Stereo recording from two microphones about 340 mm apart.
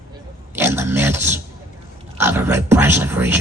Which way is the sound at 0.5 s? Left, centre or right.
Centre.